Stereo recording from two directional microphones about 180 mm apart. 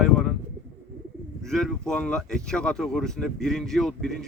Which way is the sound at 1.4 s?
5° left (ahead or behind).